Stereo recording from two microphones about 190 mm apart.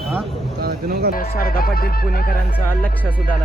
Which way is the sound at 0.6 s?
55° right (ahead or behind).